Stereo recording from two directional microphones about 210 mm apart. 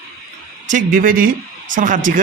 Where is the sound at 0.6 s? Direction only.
40° right (ahead or behind).